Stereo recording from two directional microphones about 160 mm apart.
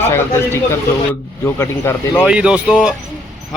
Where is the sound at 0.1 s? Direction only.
15° left (ahead or behind).